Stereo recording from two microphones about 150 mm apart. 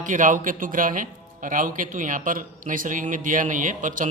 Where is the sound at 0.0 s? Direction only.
60° right (ahead or behind).